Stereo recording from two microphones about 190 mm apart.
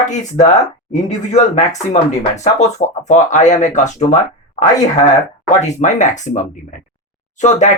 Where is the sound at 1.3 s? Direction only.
40° left (ahead or behind).